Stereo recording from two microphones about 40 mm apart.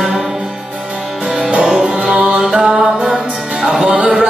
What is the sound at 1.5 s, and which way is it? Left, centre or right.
Music, right.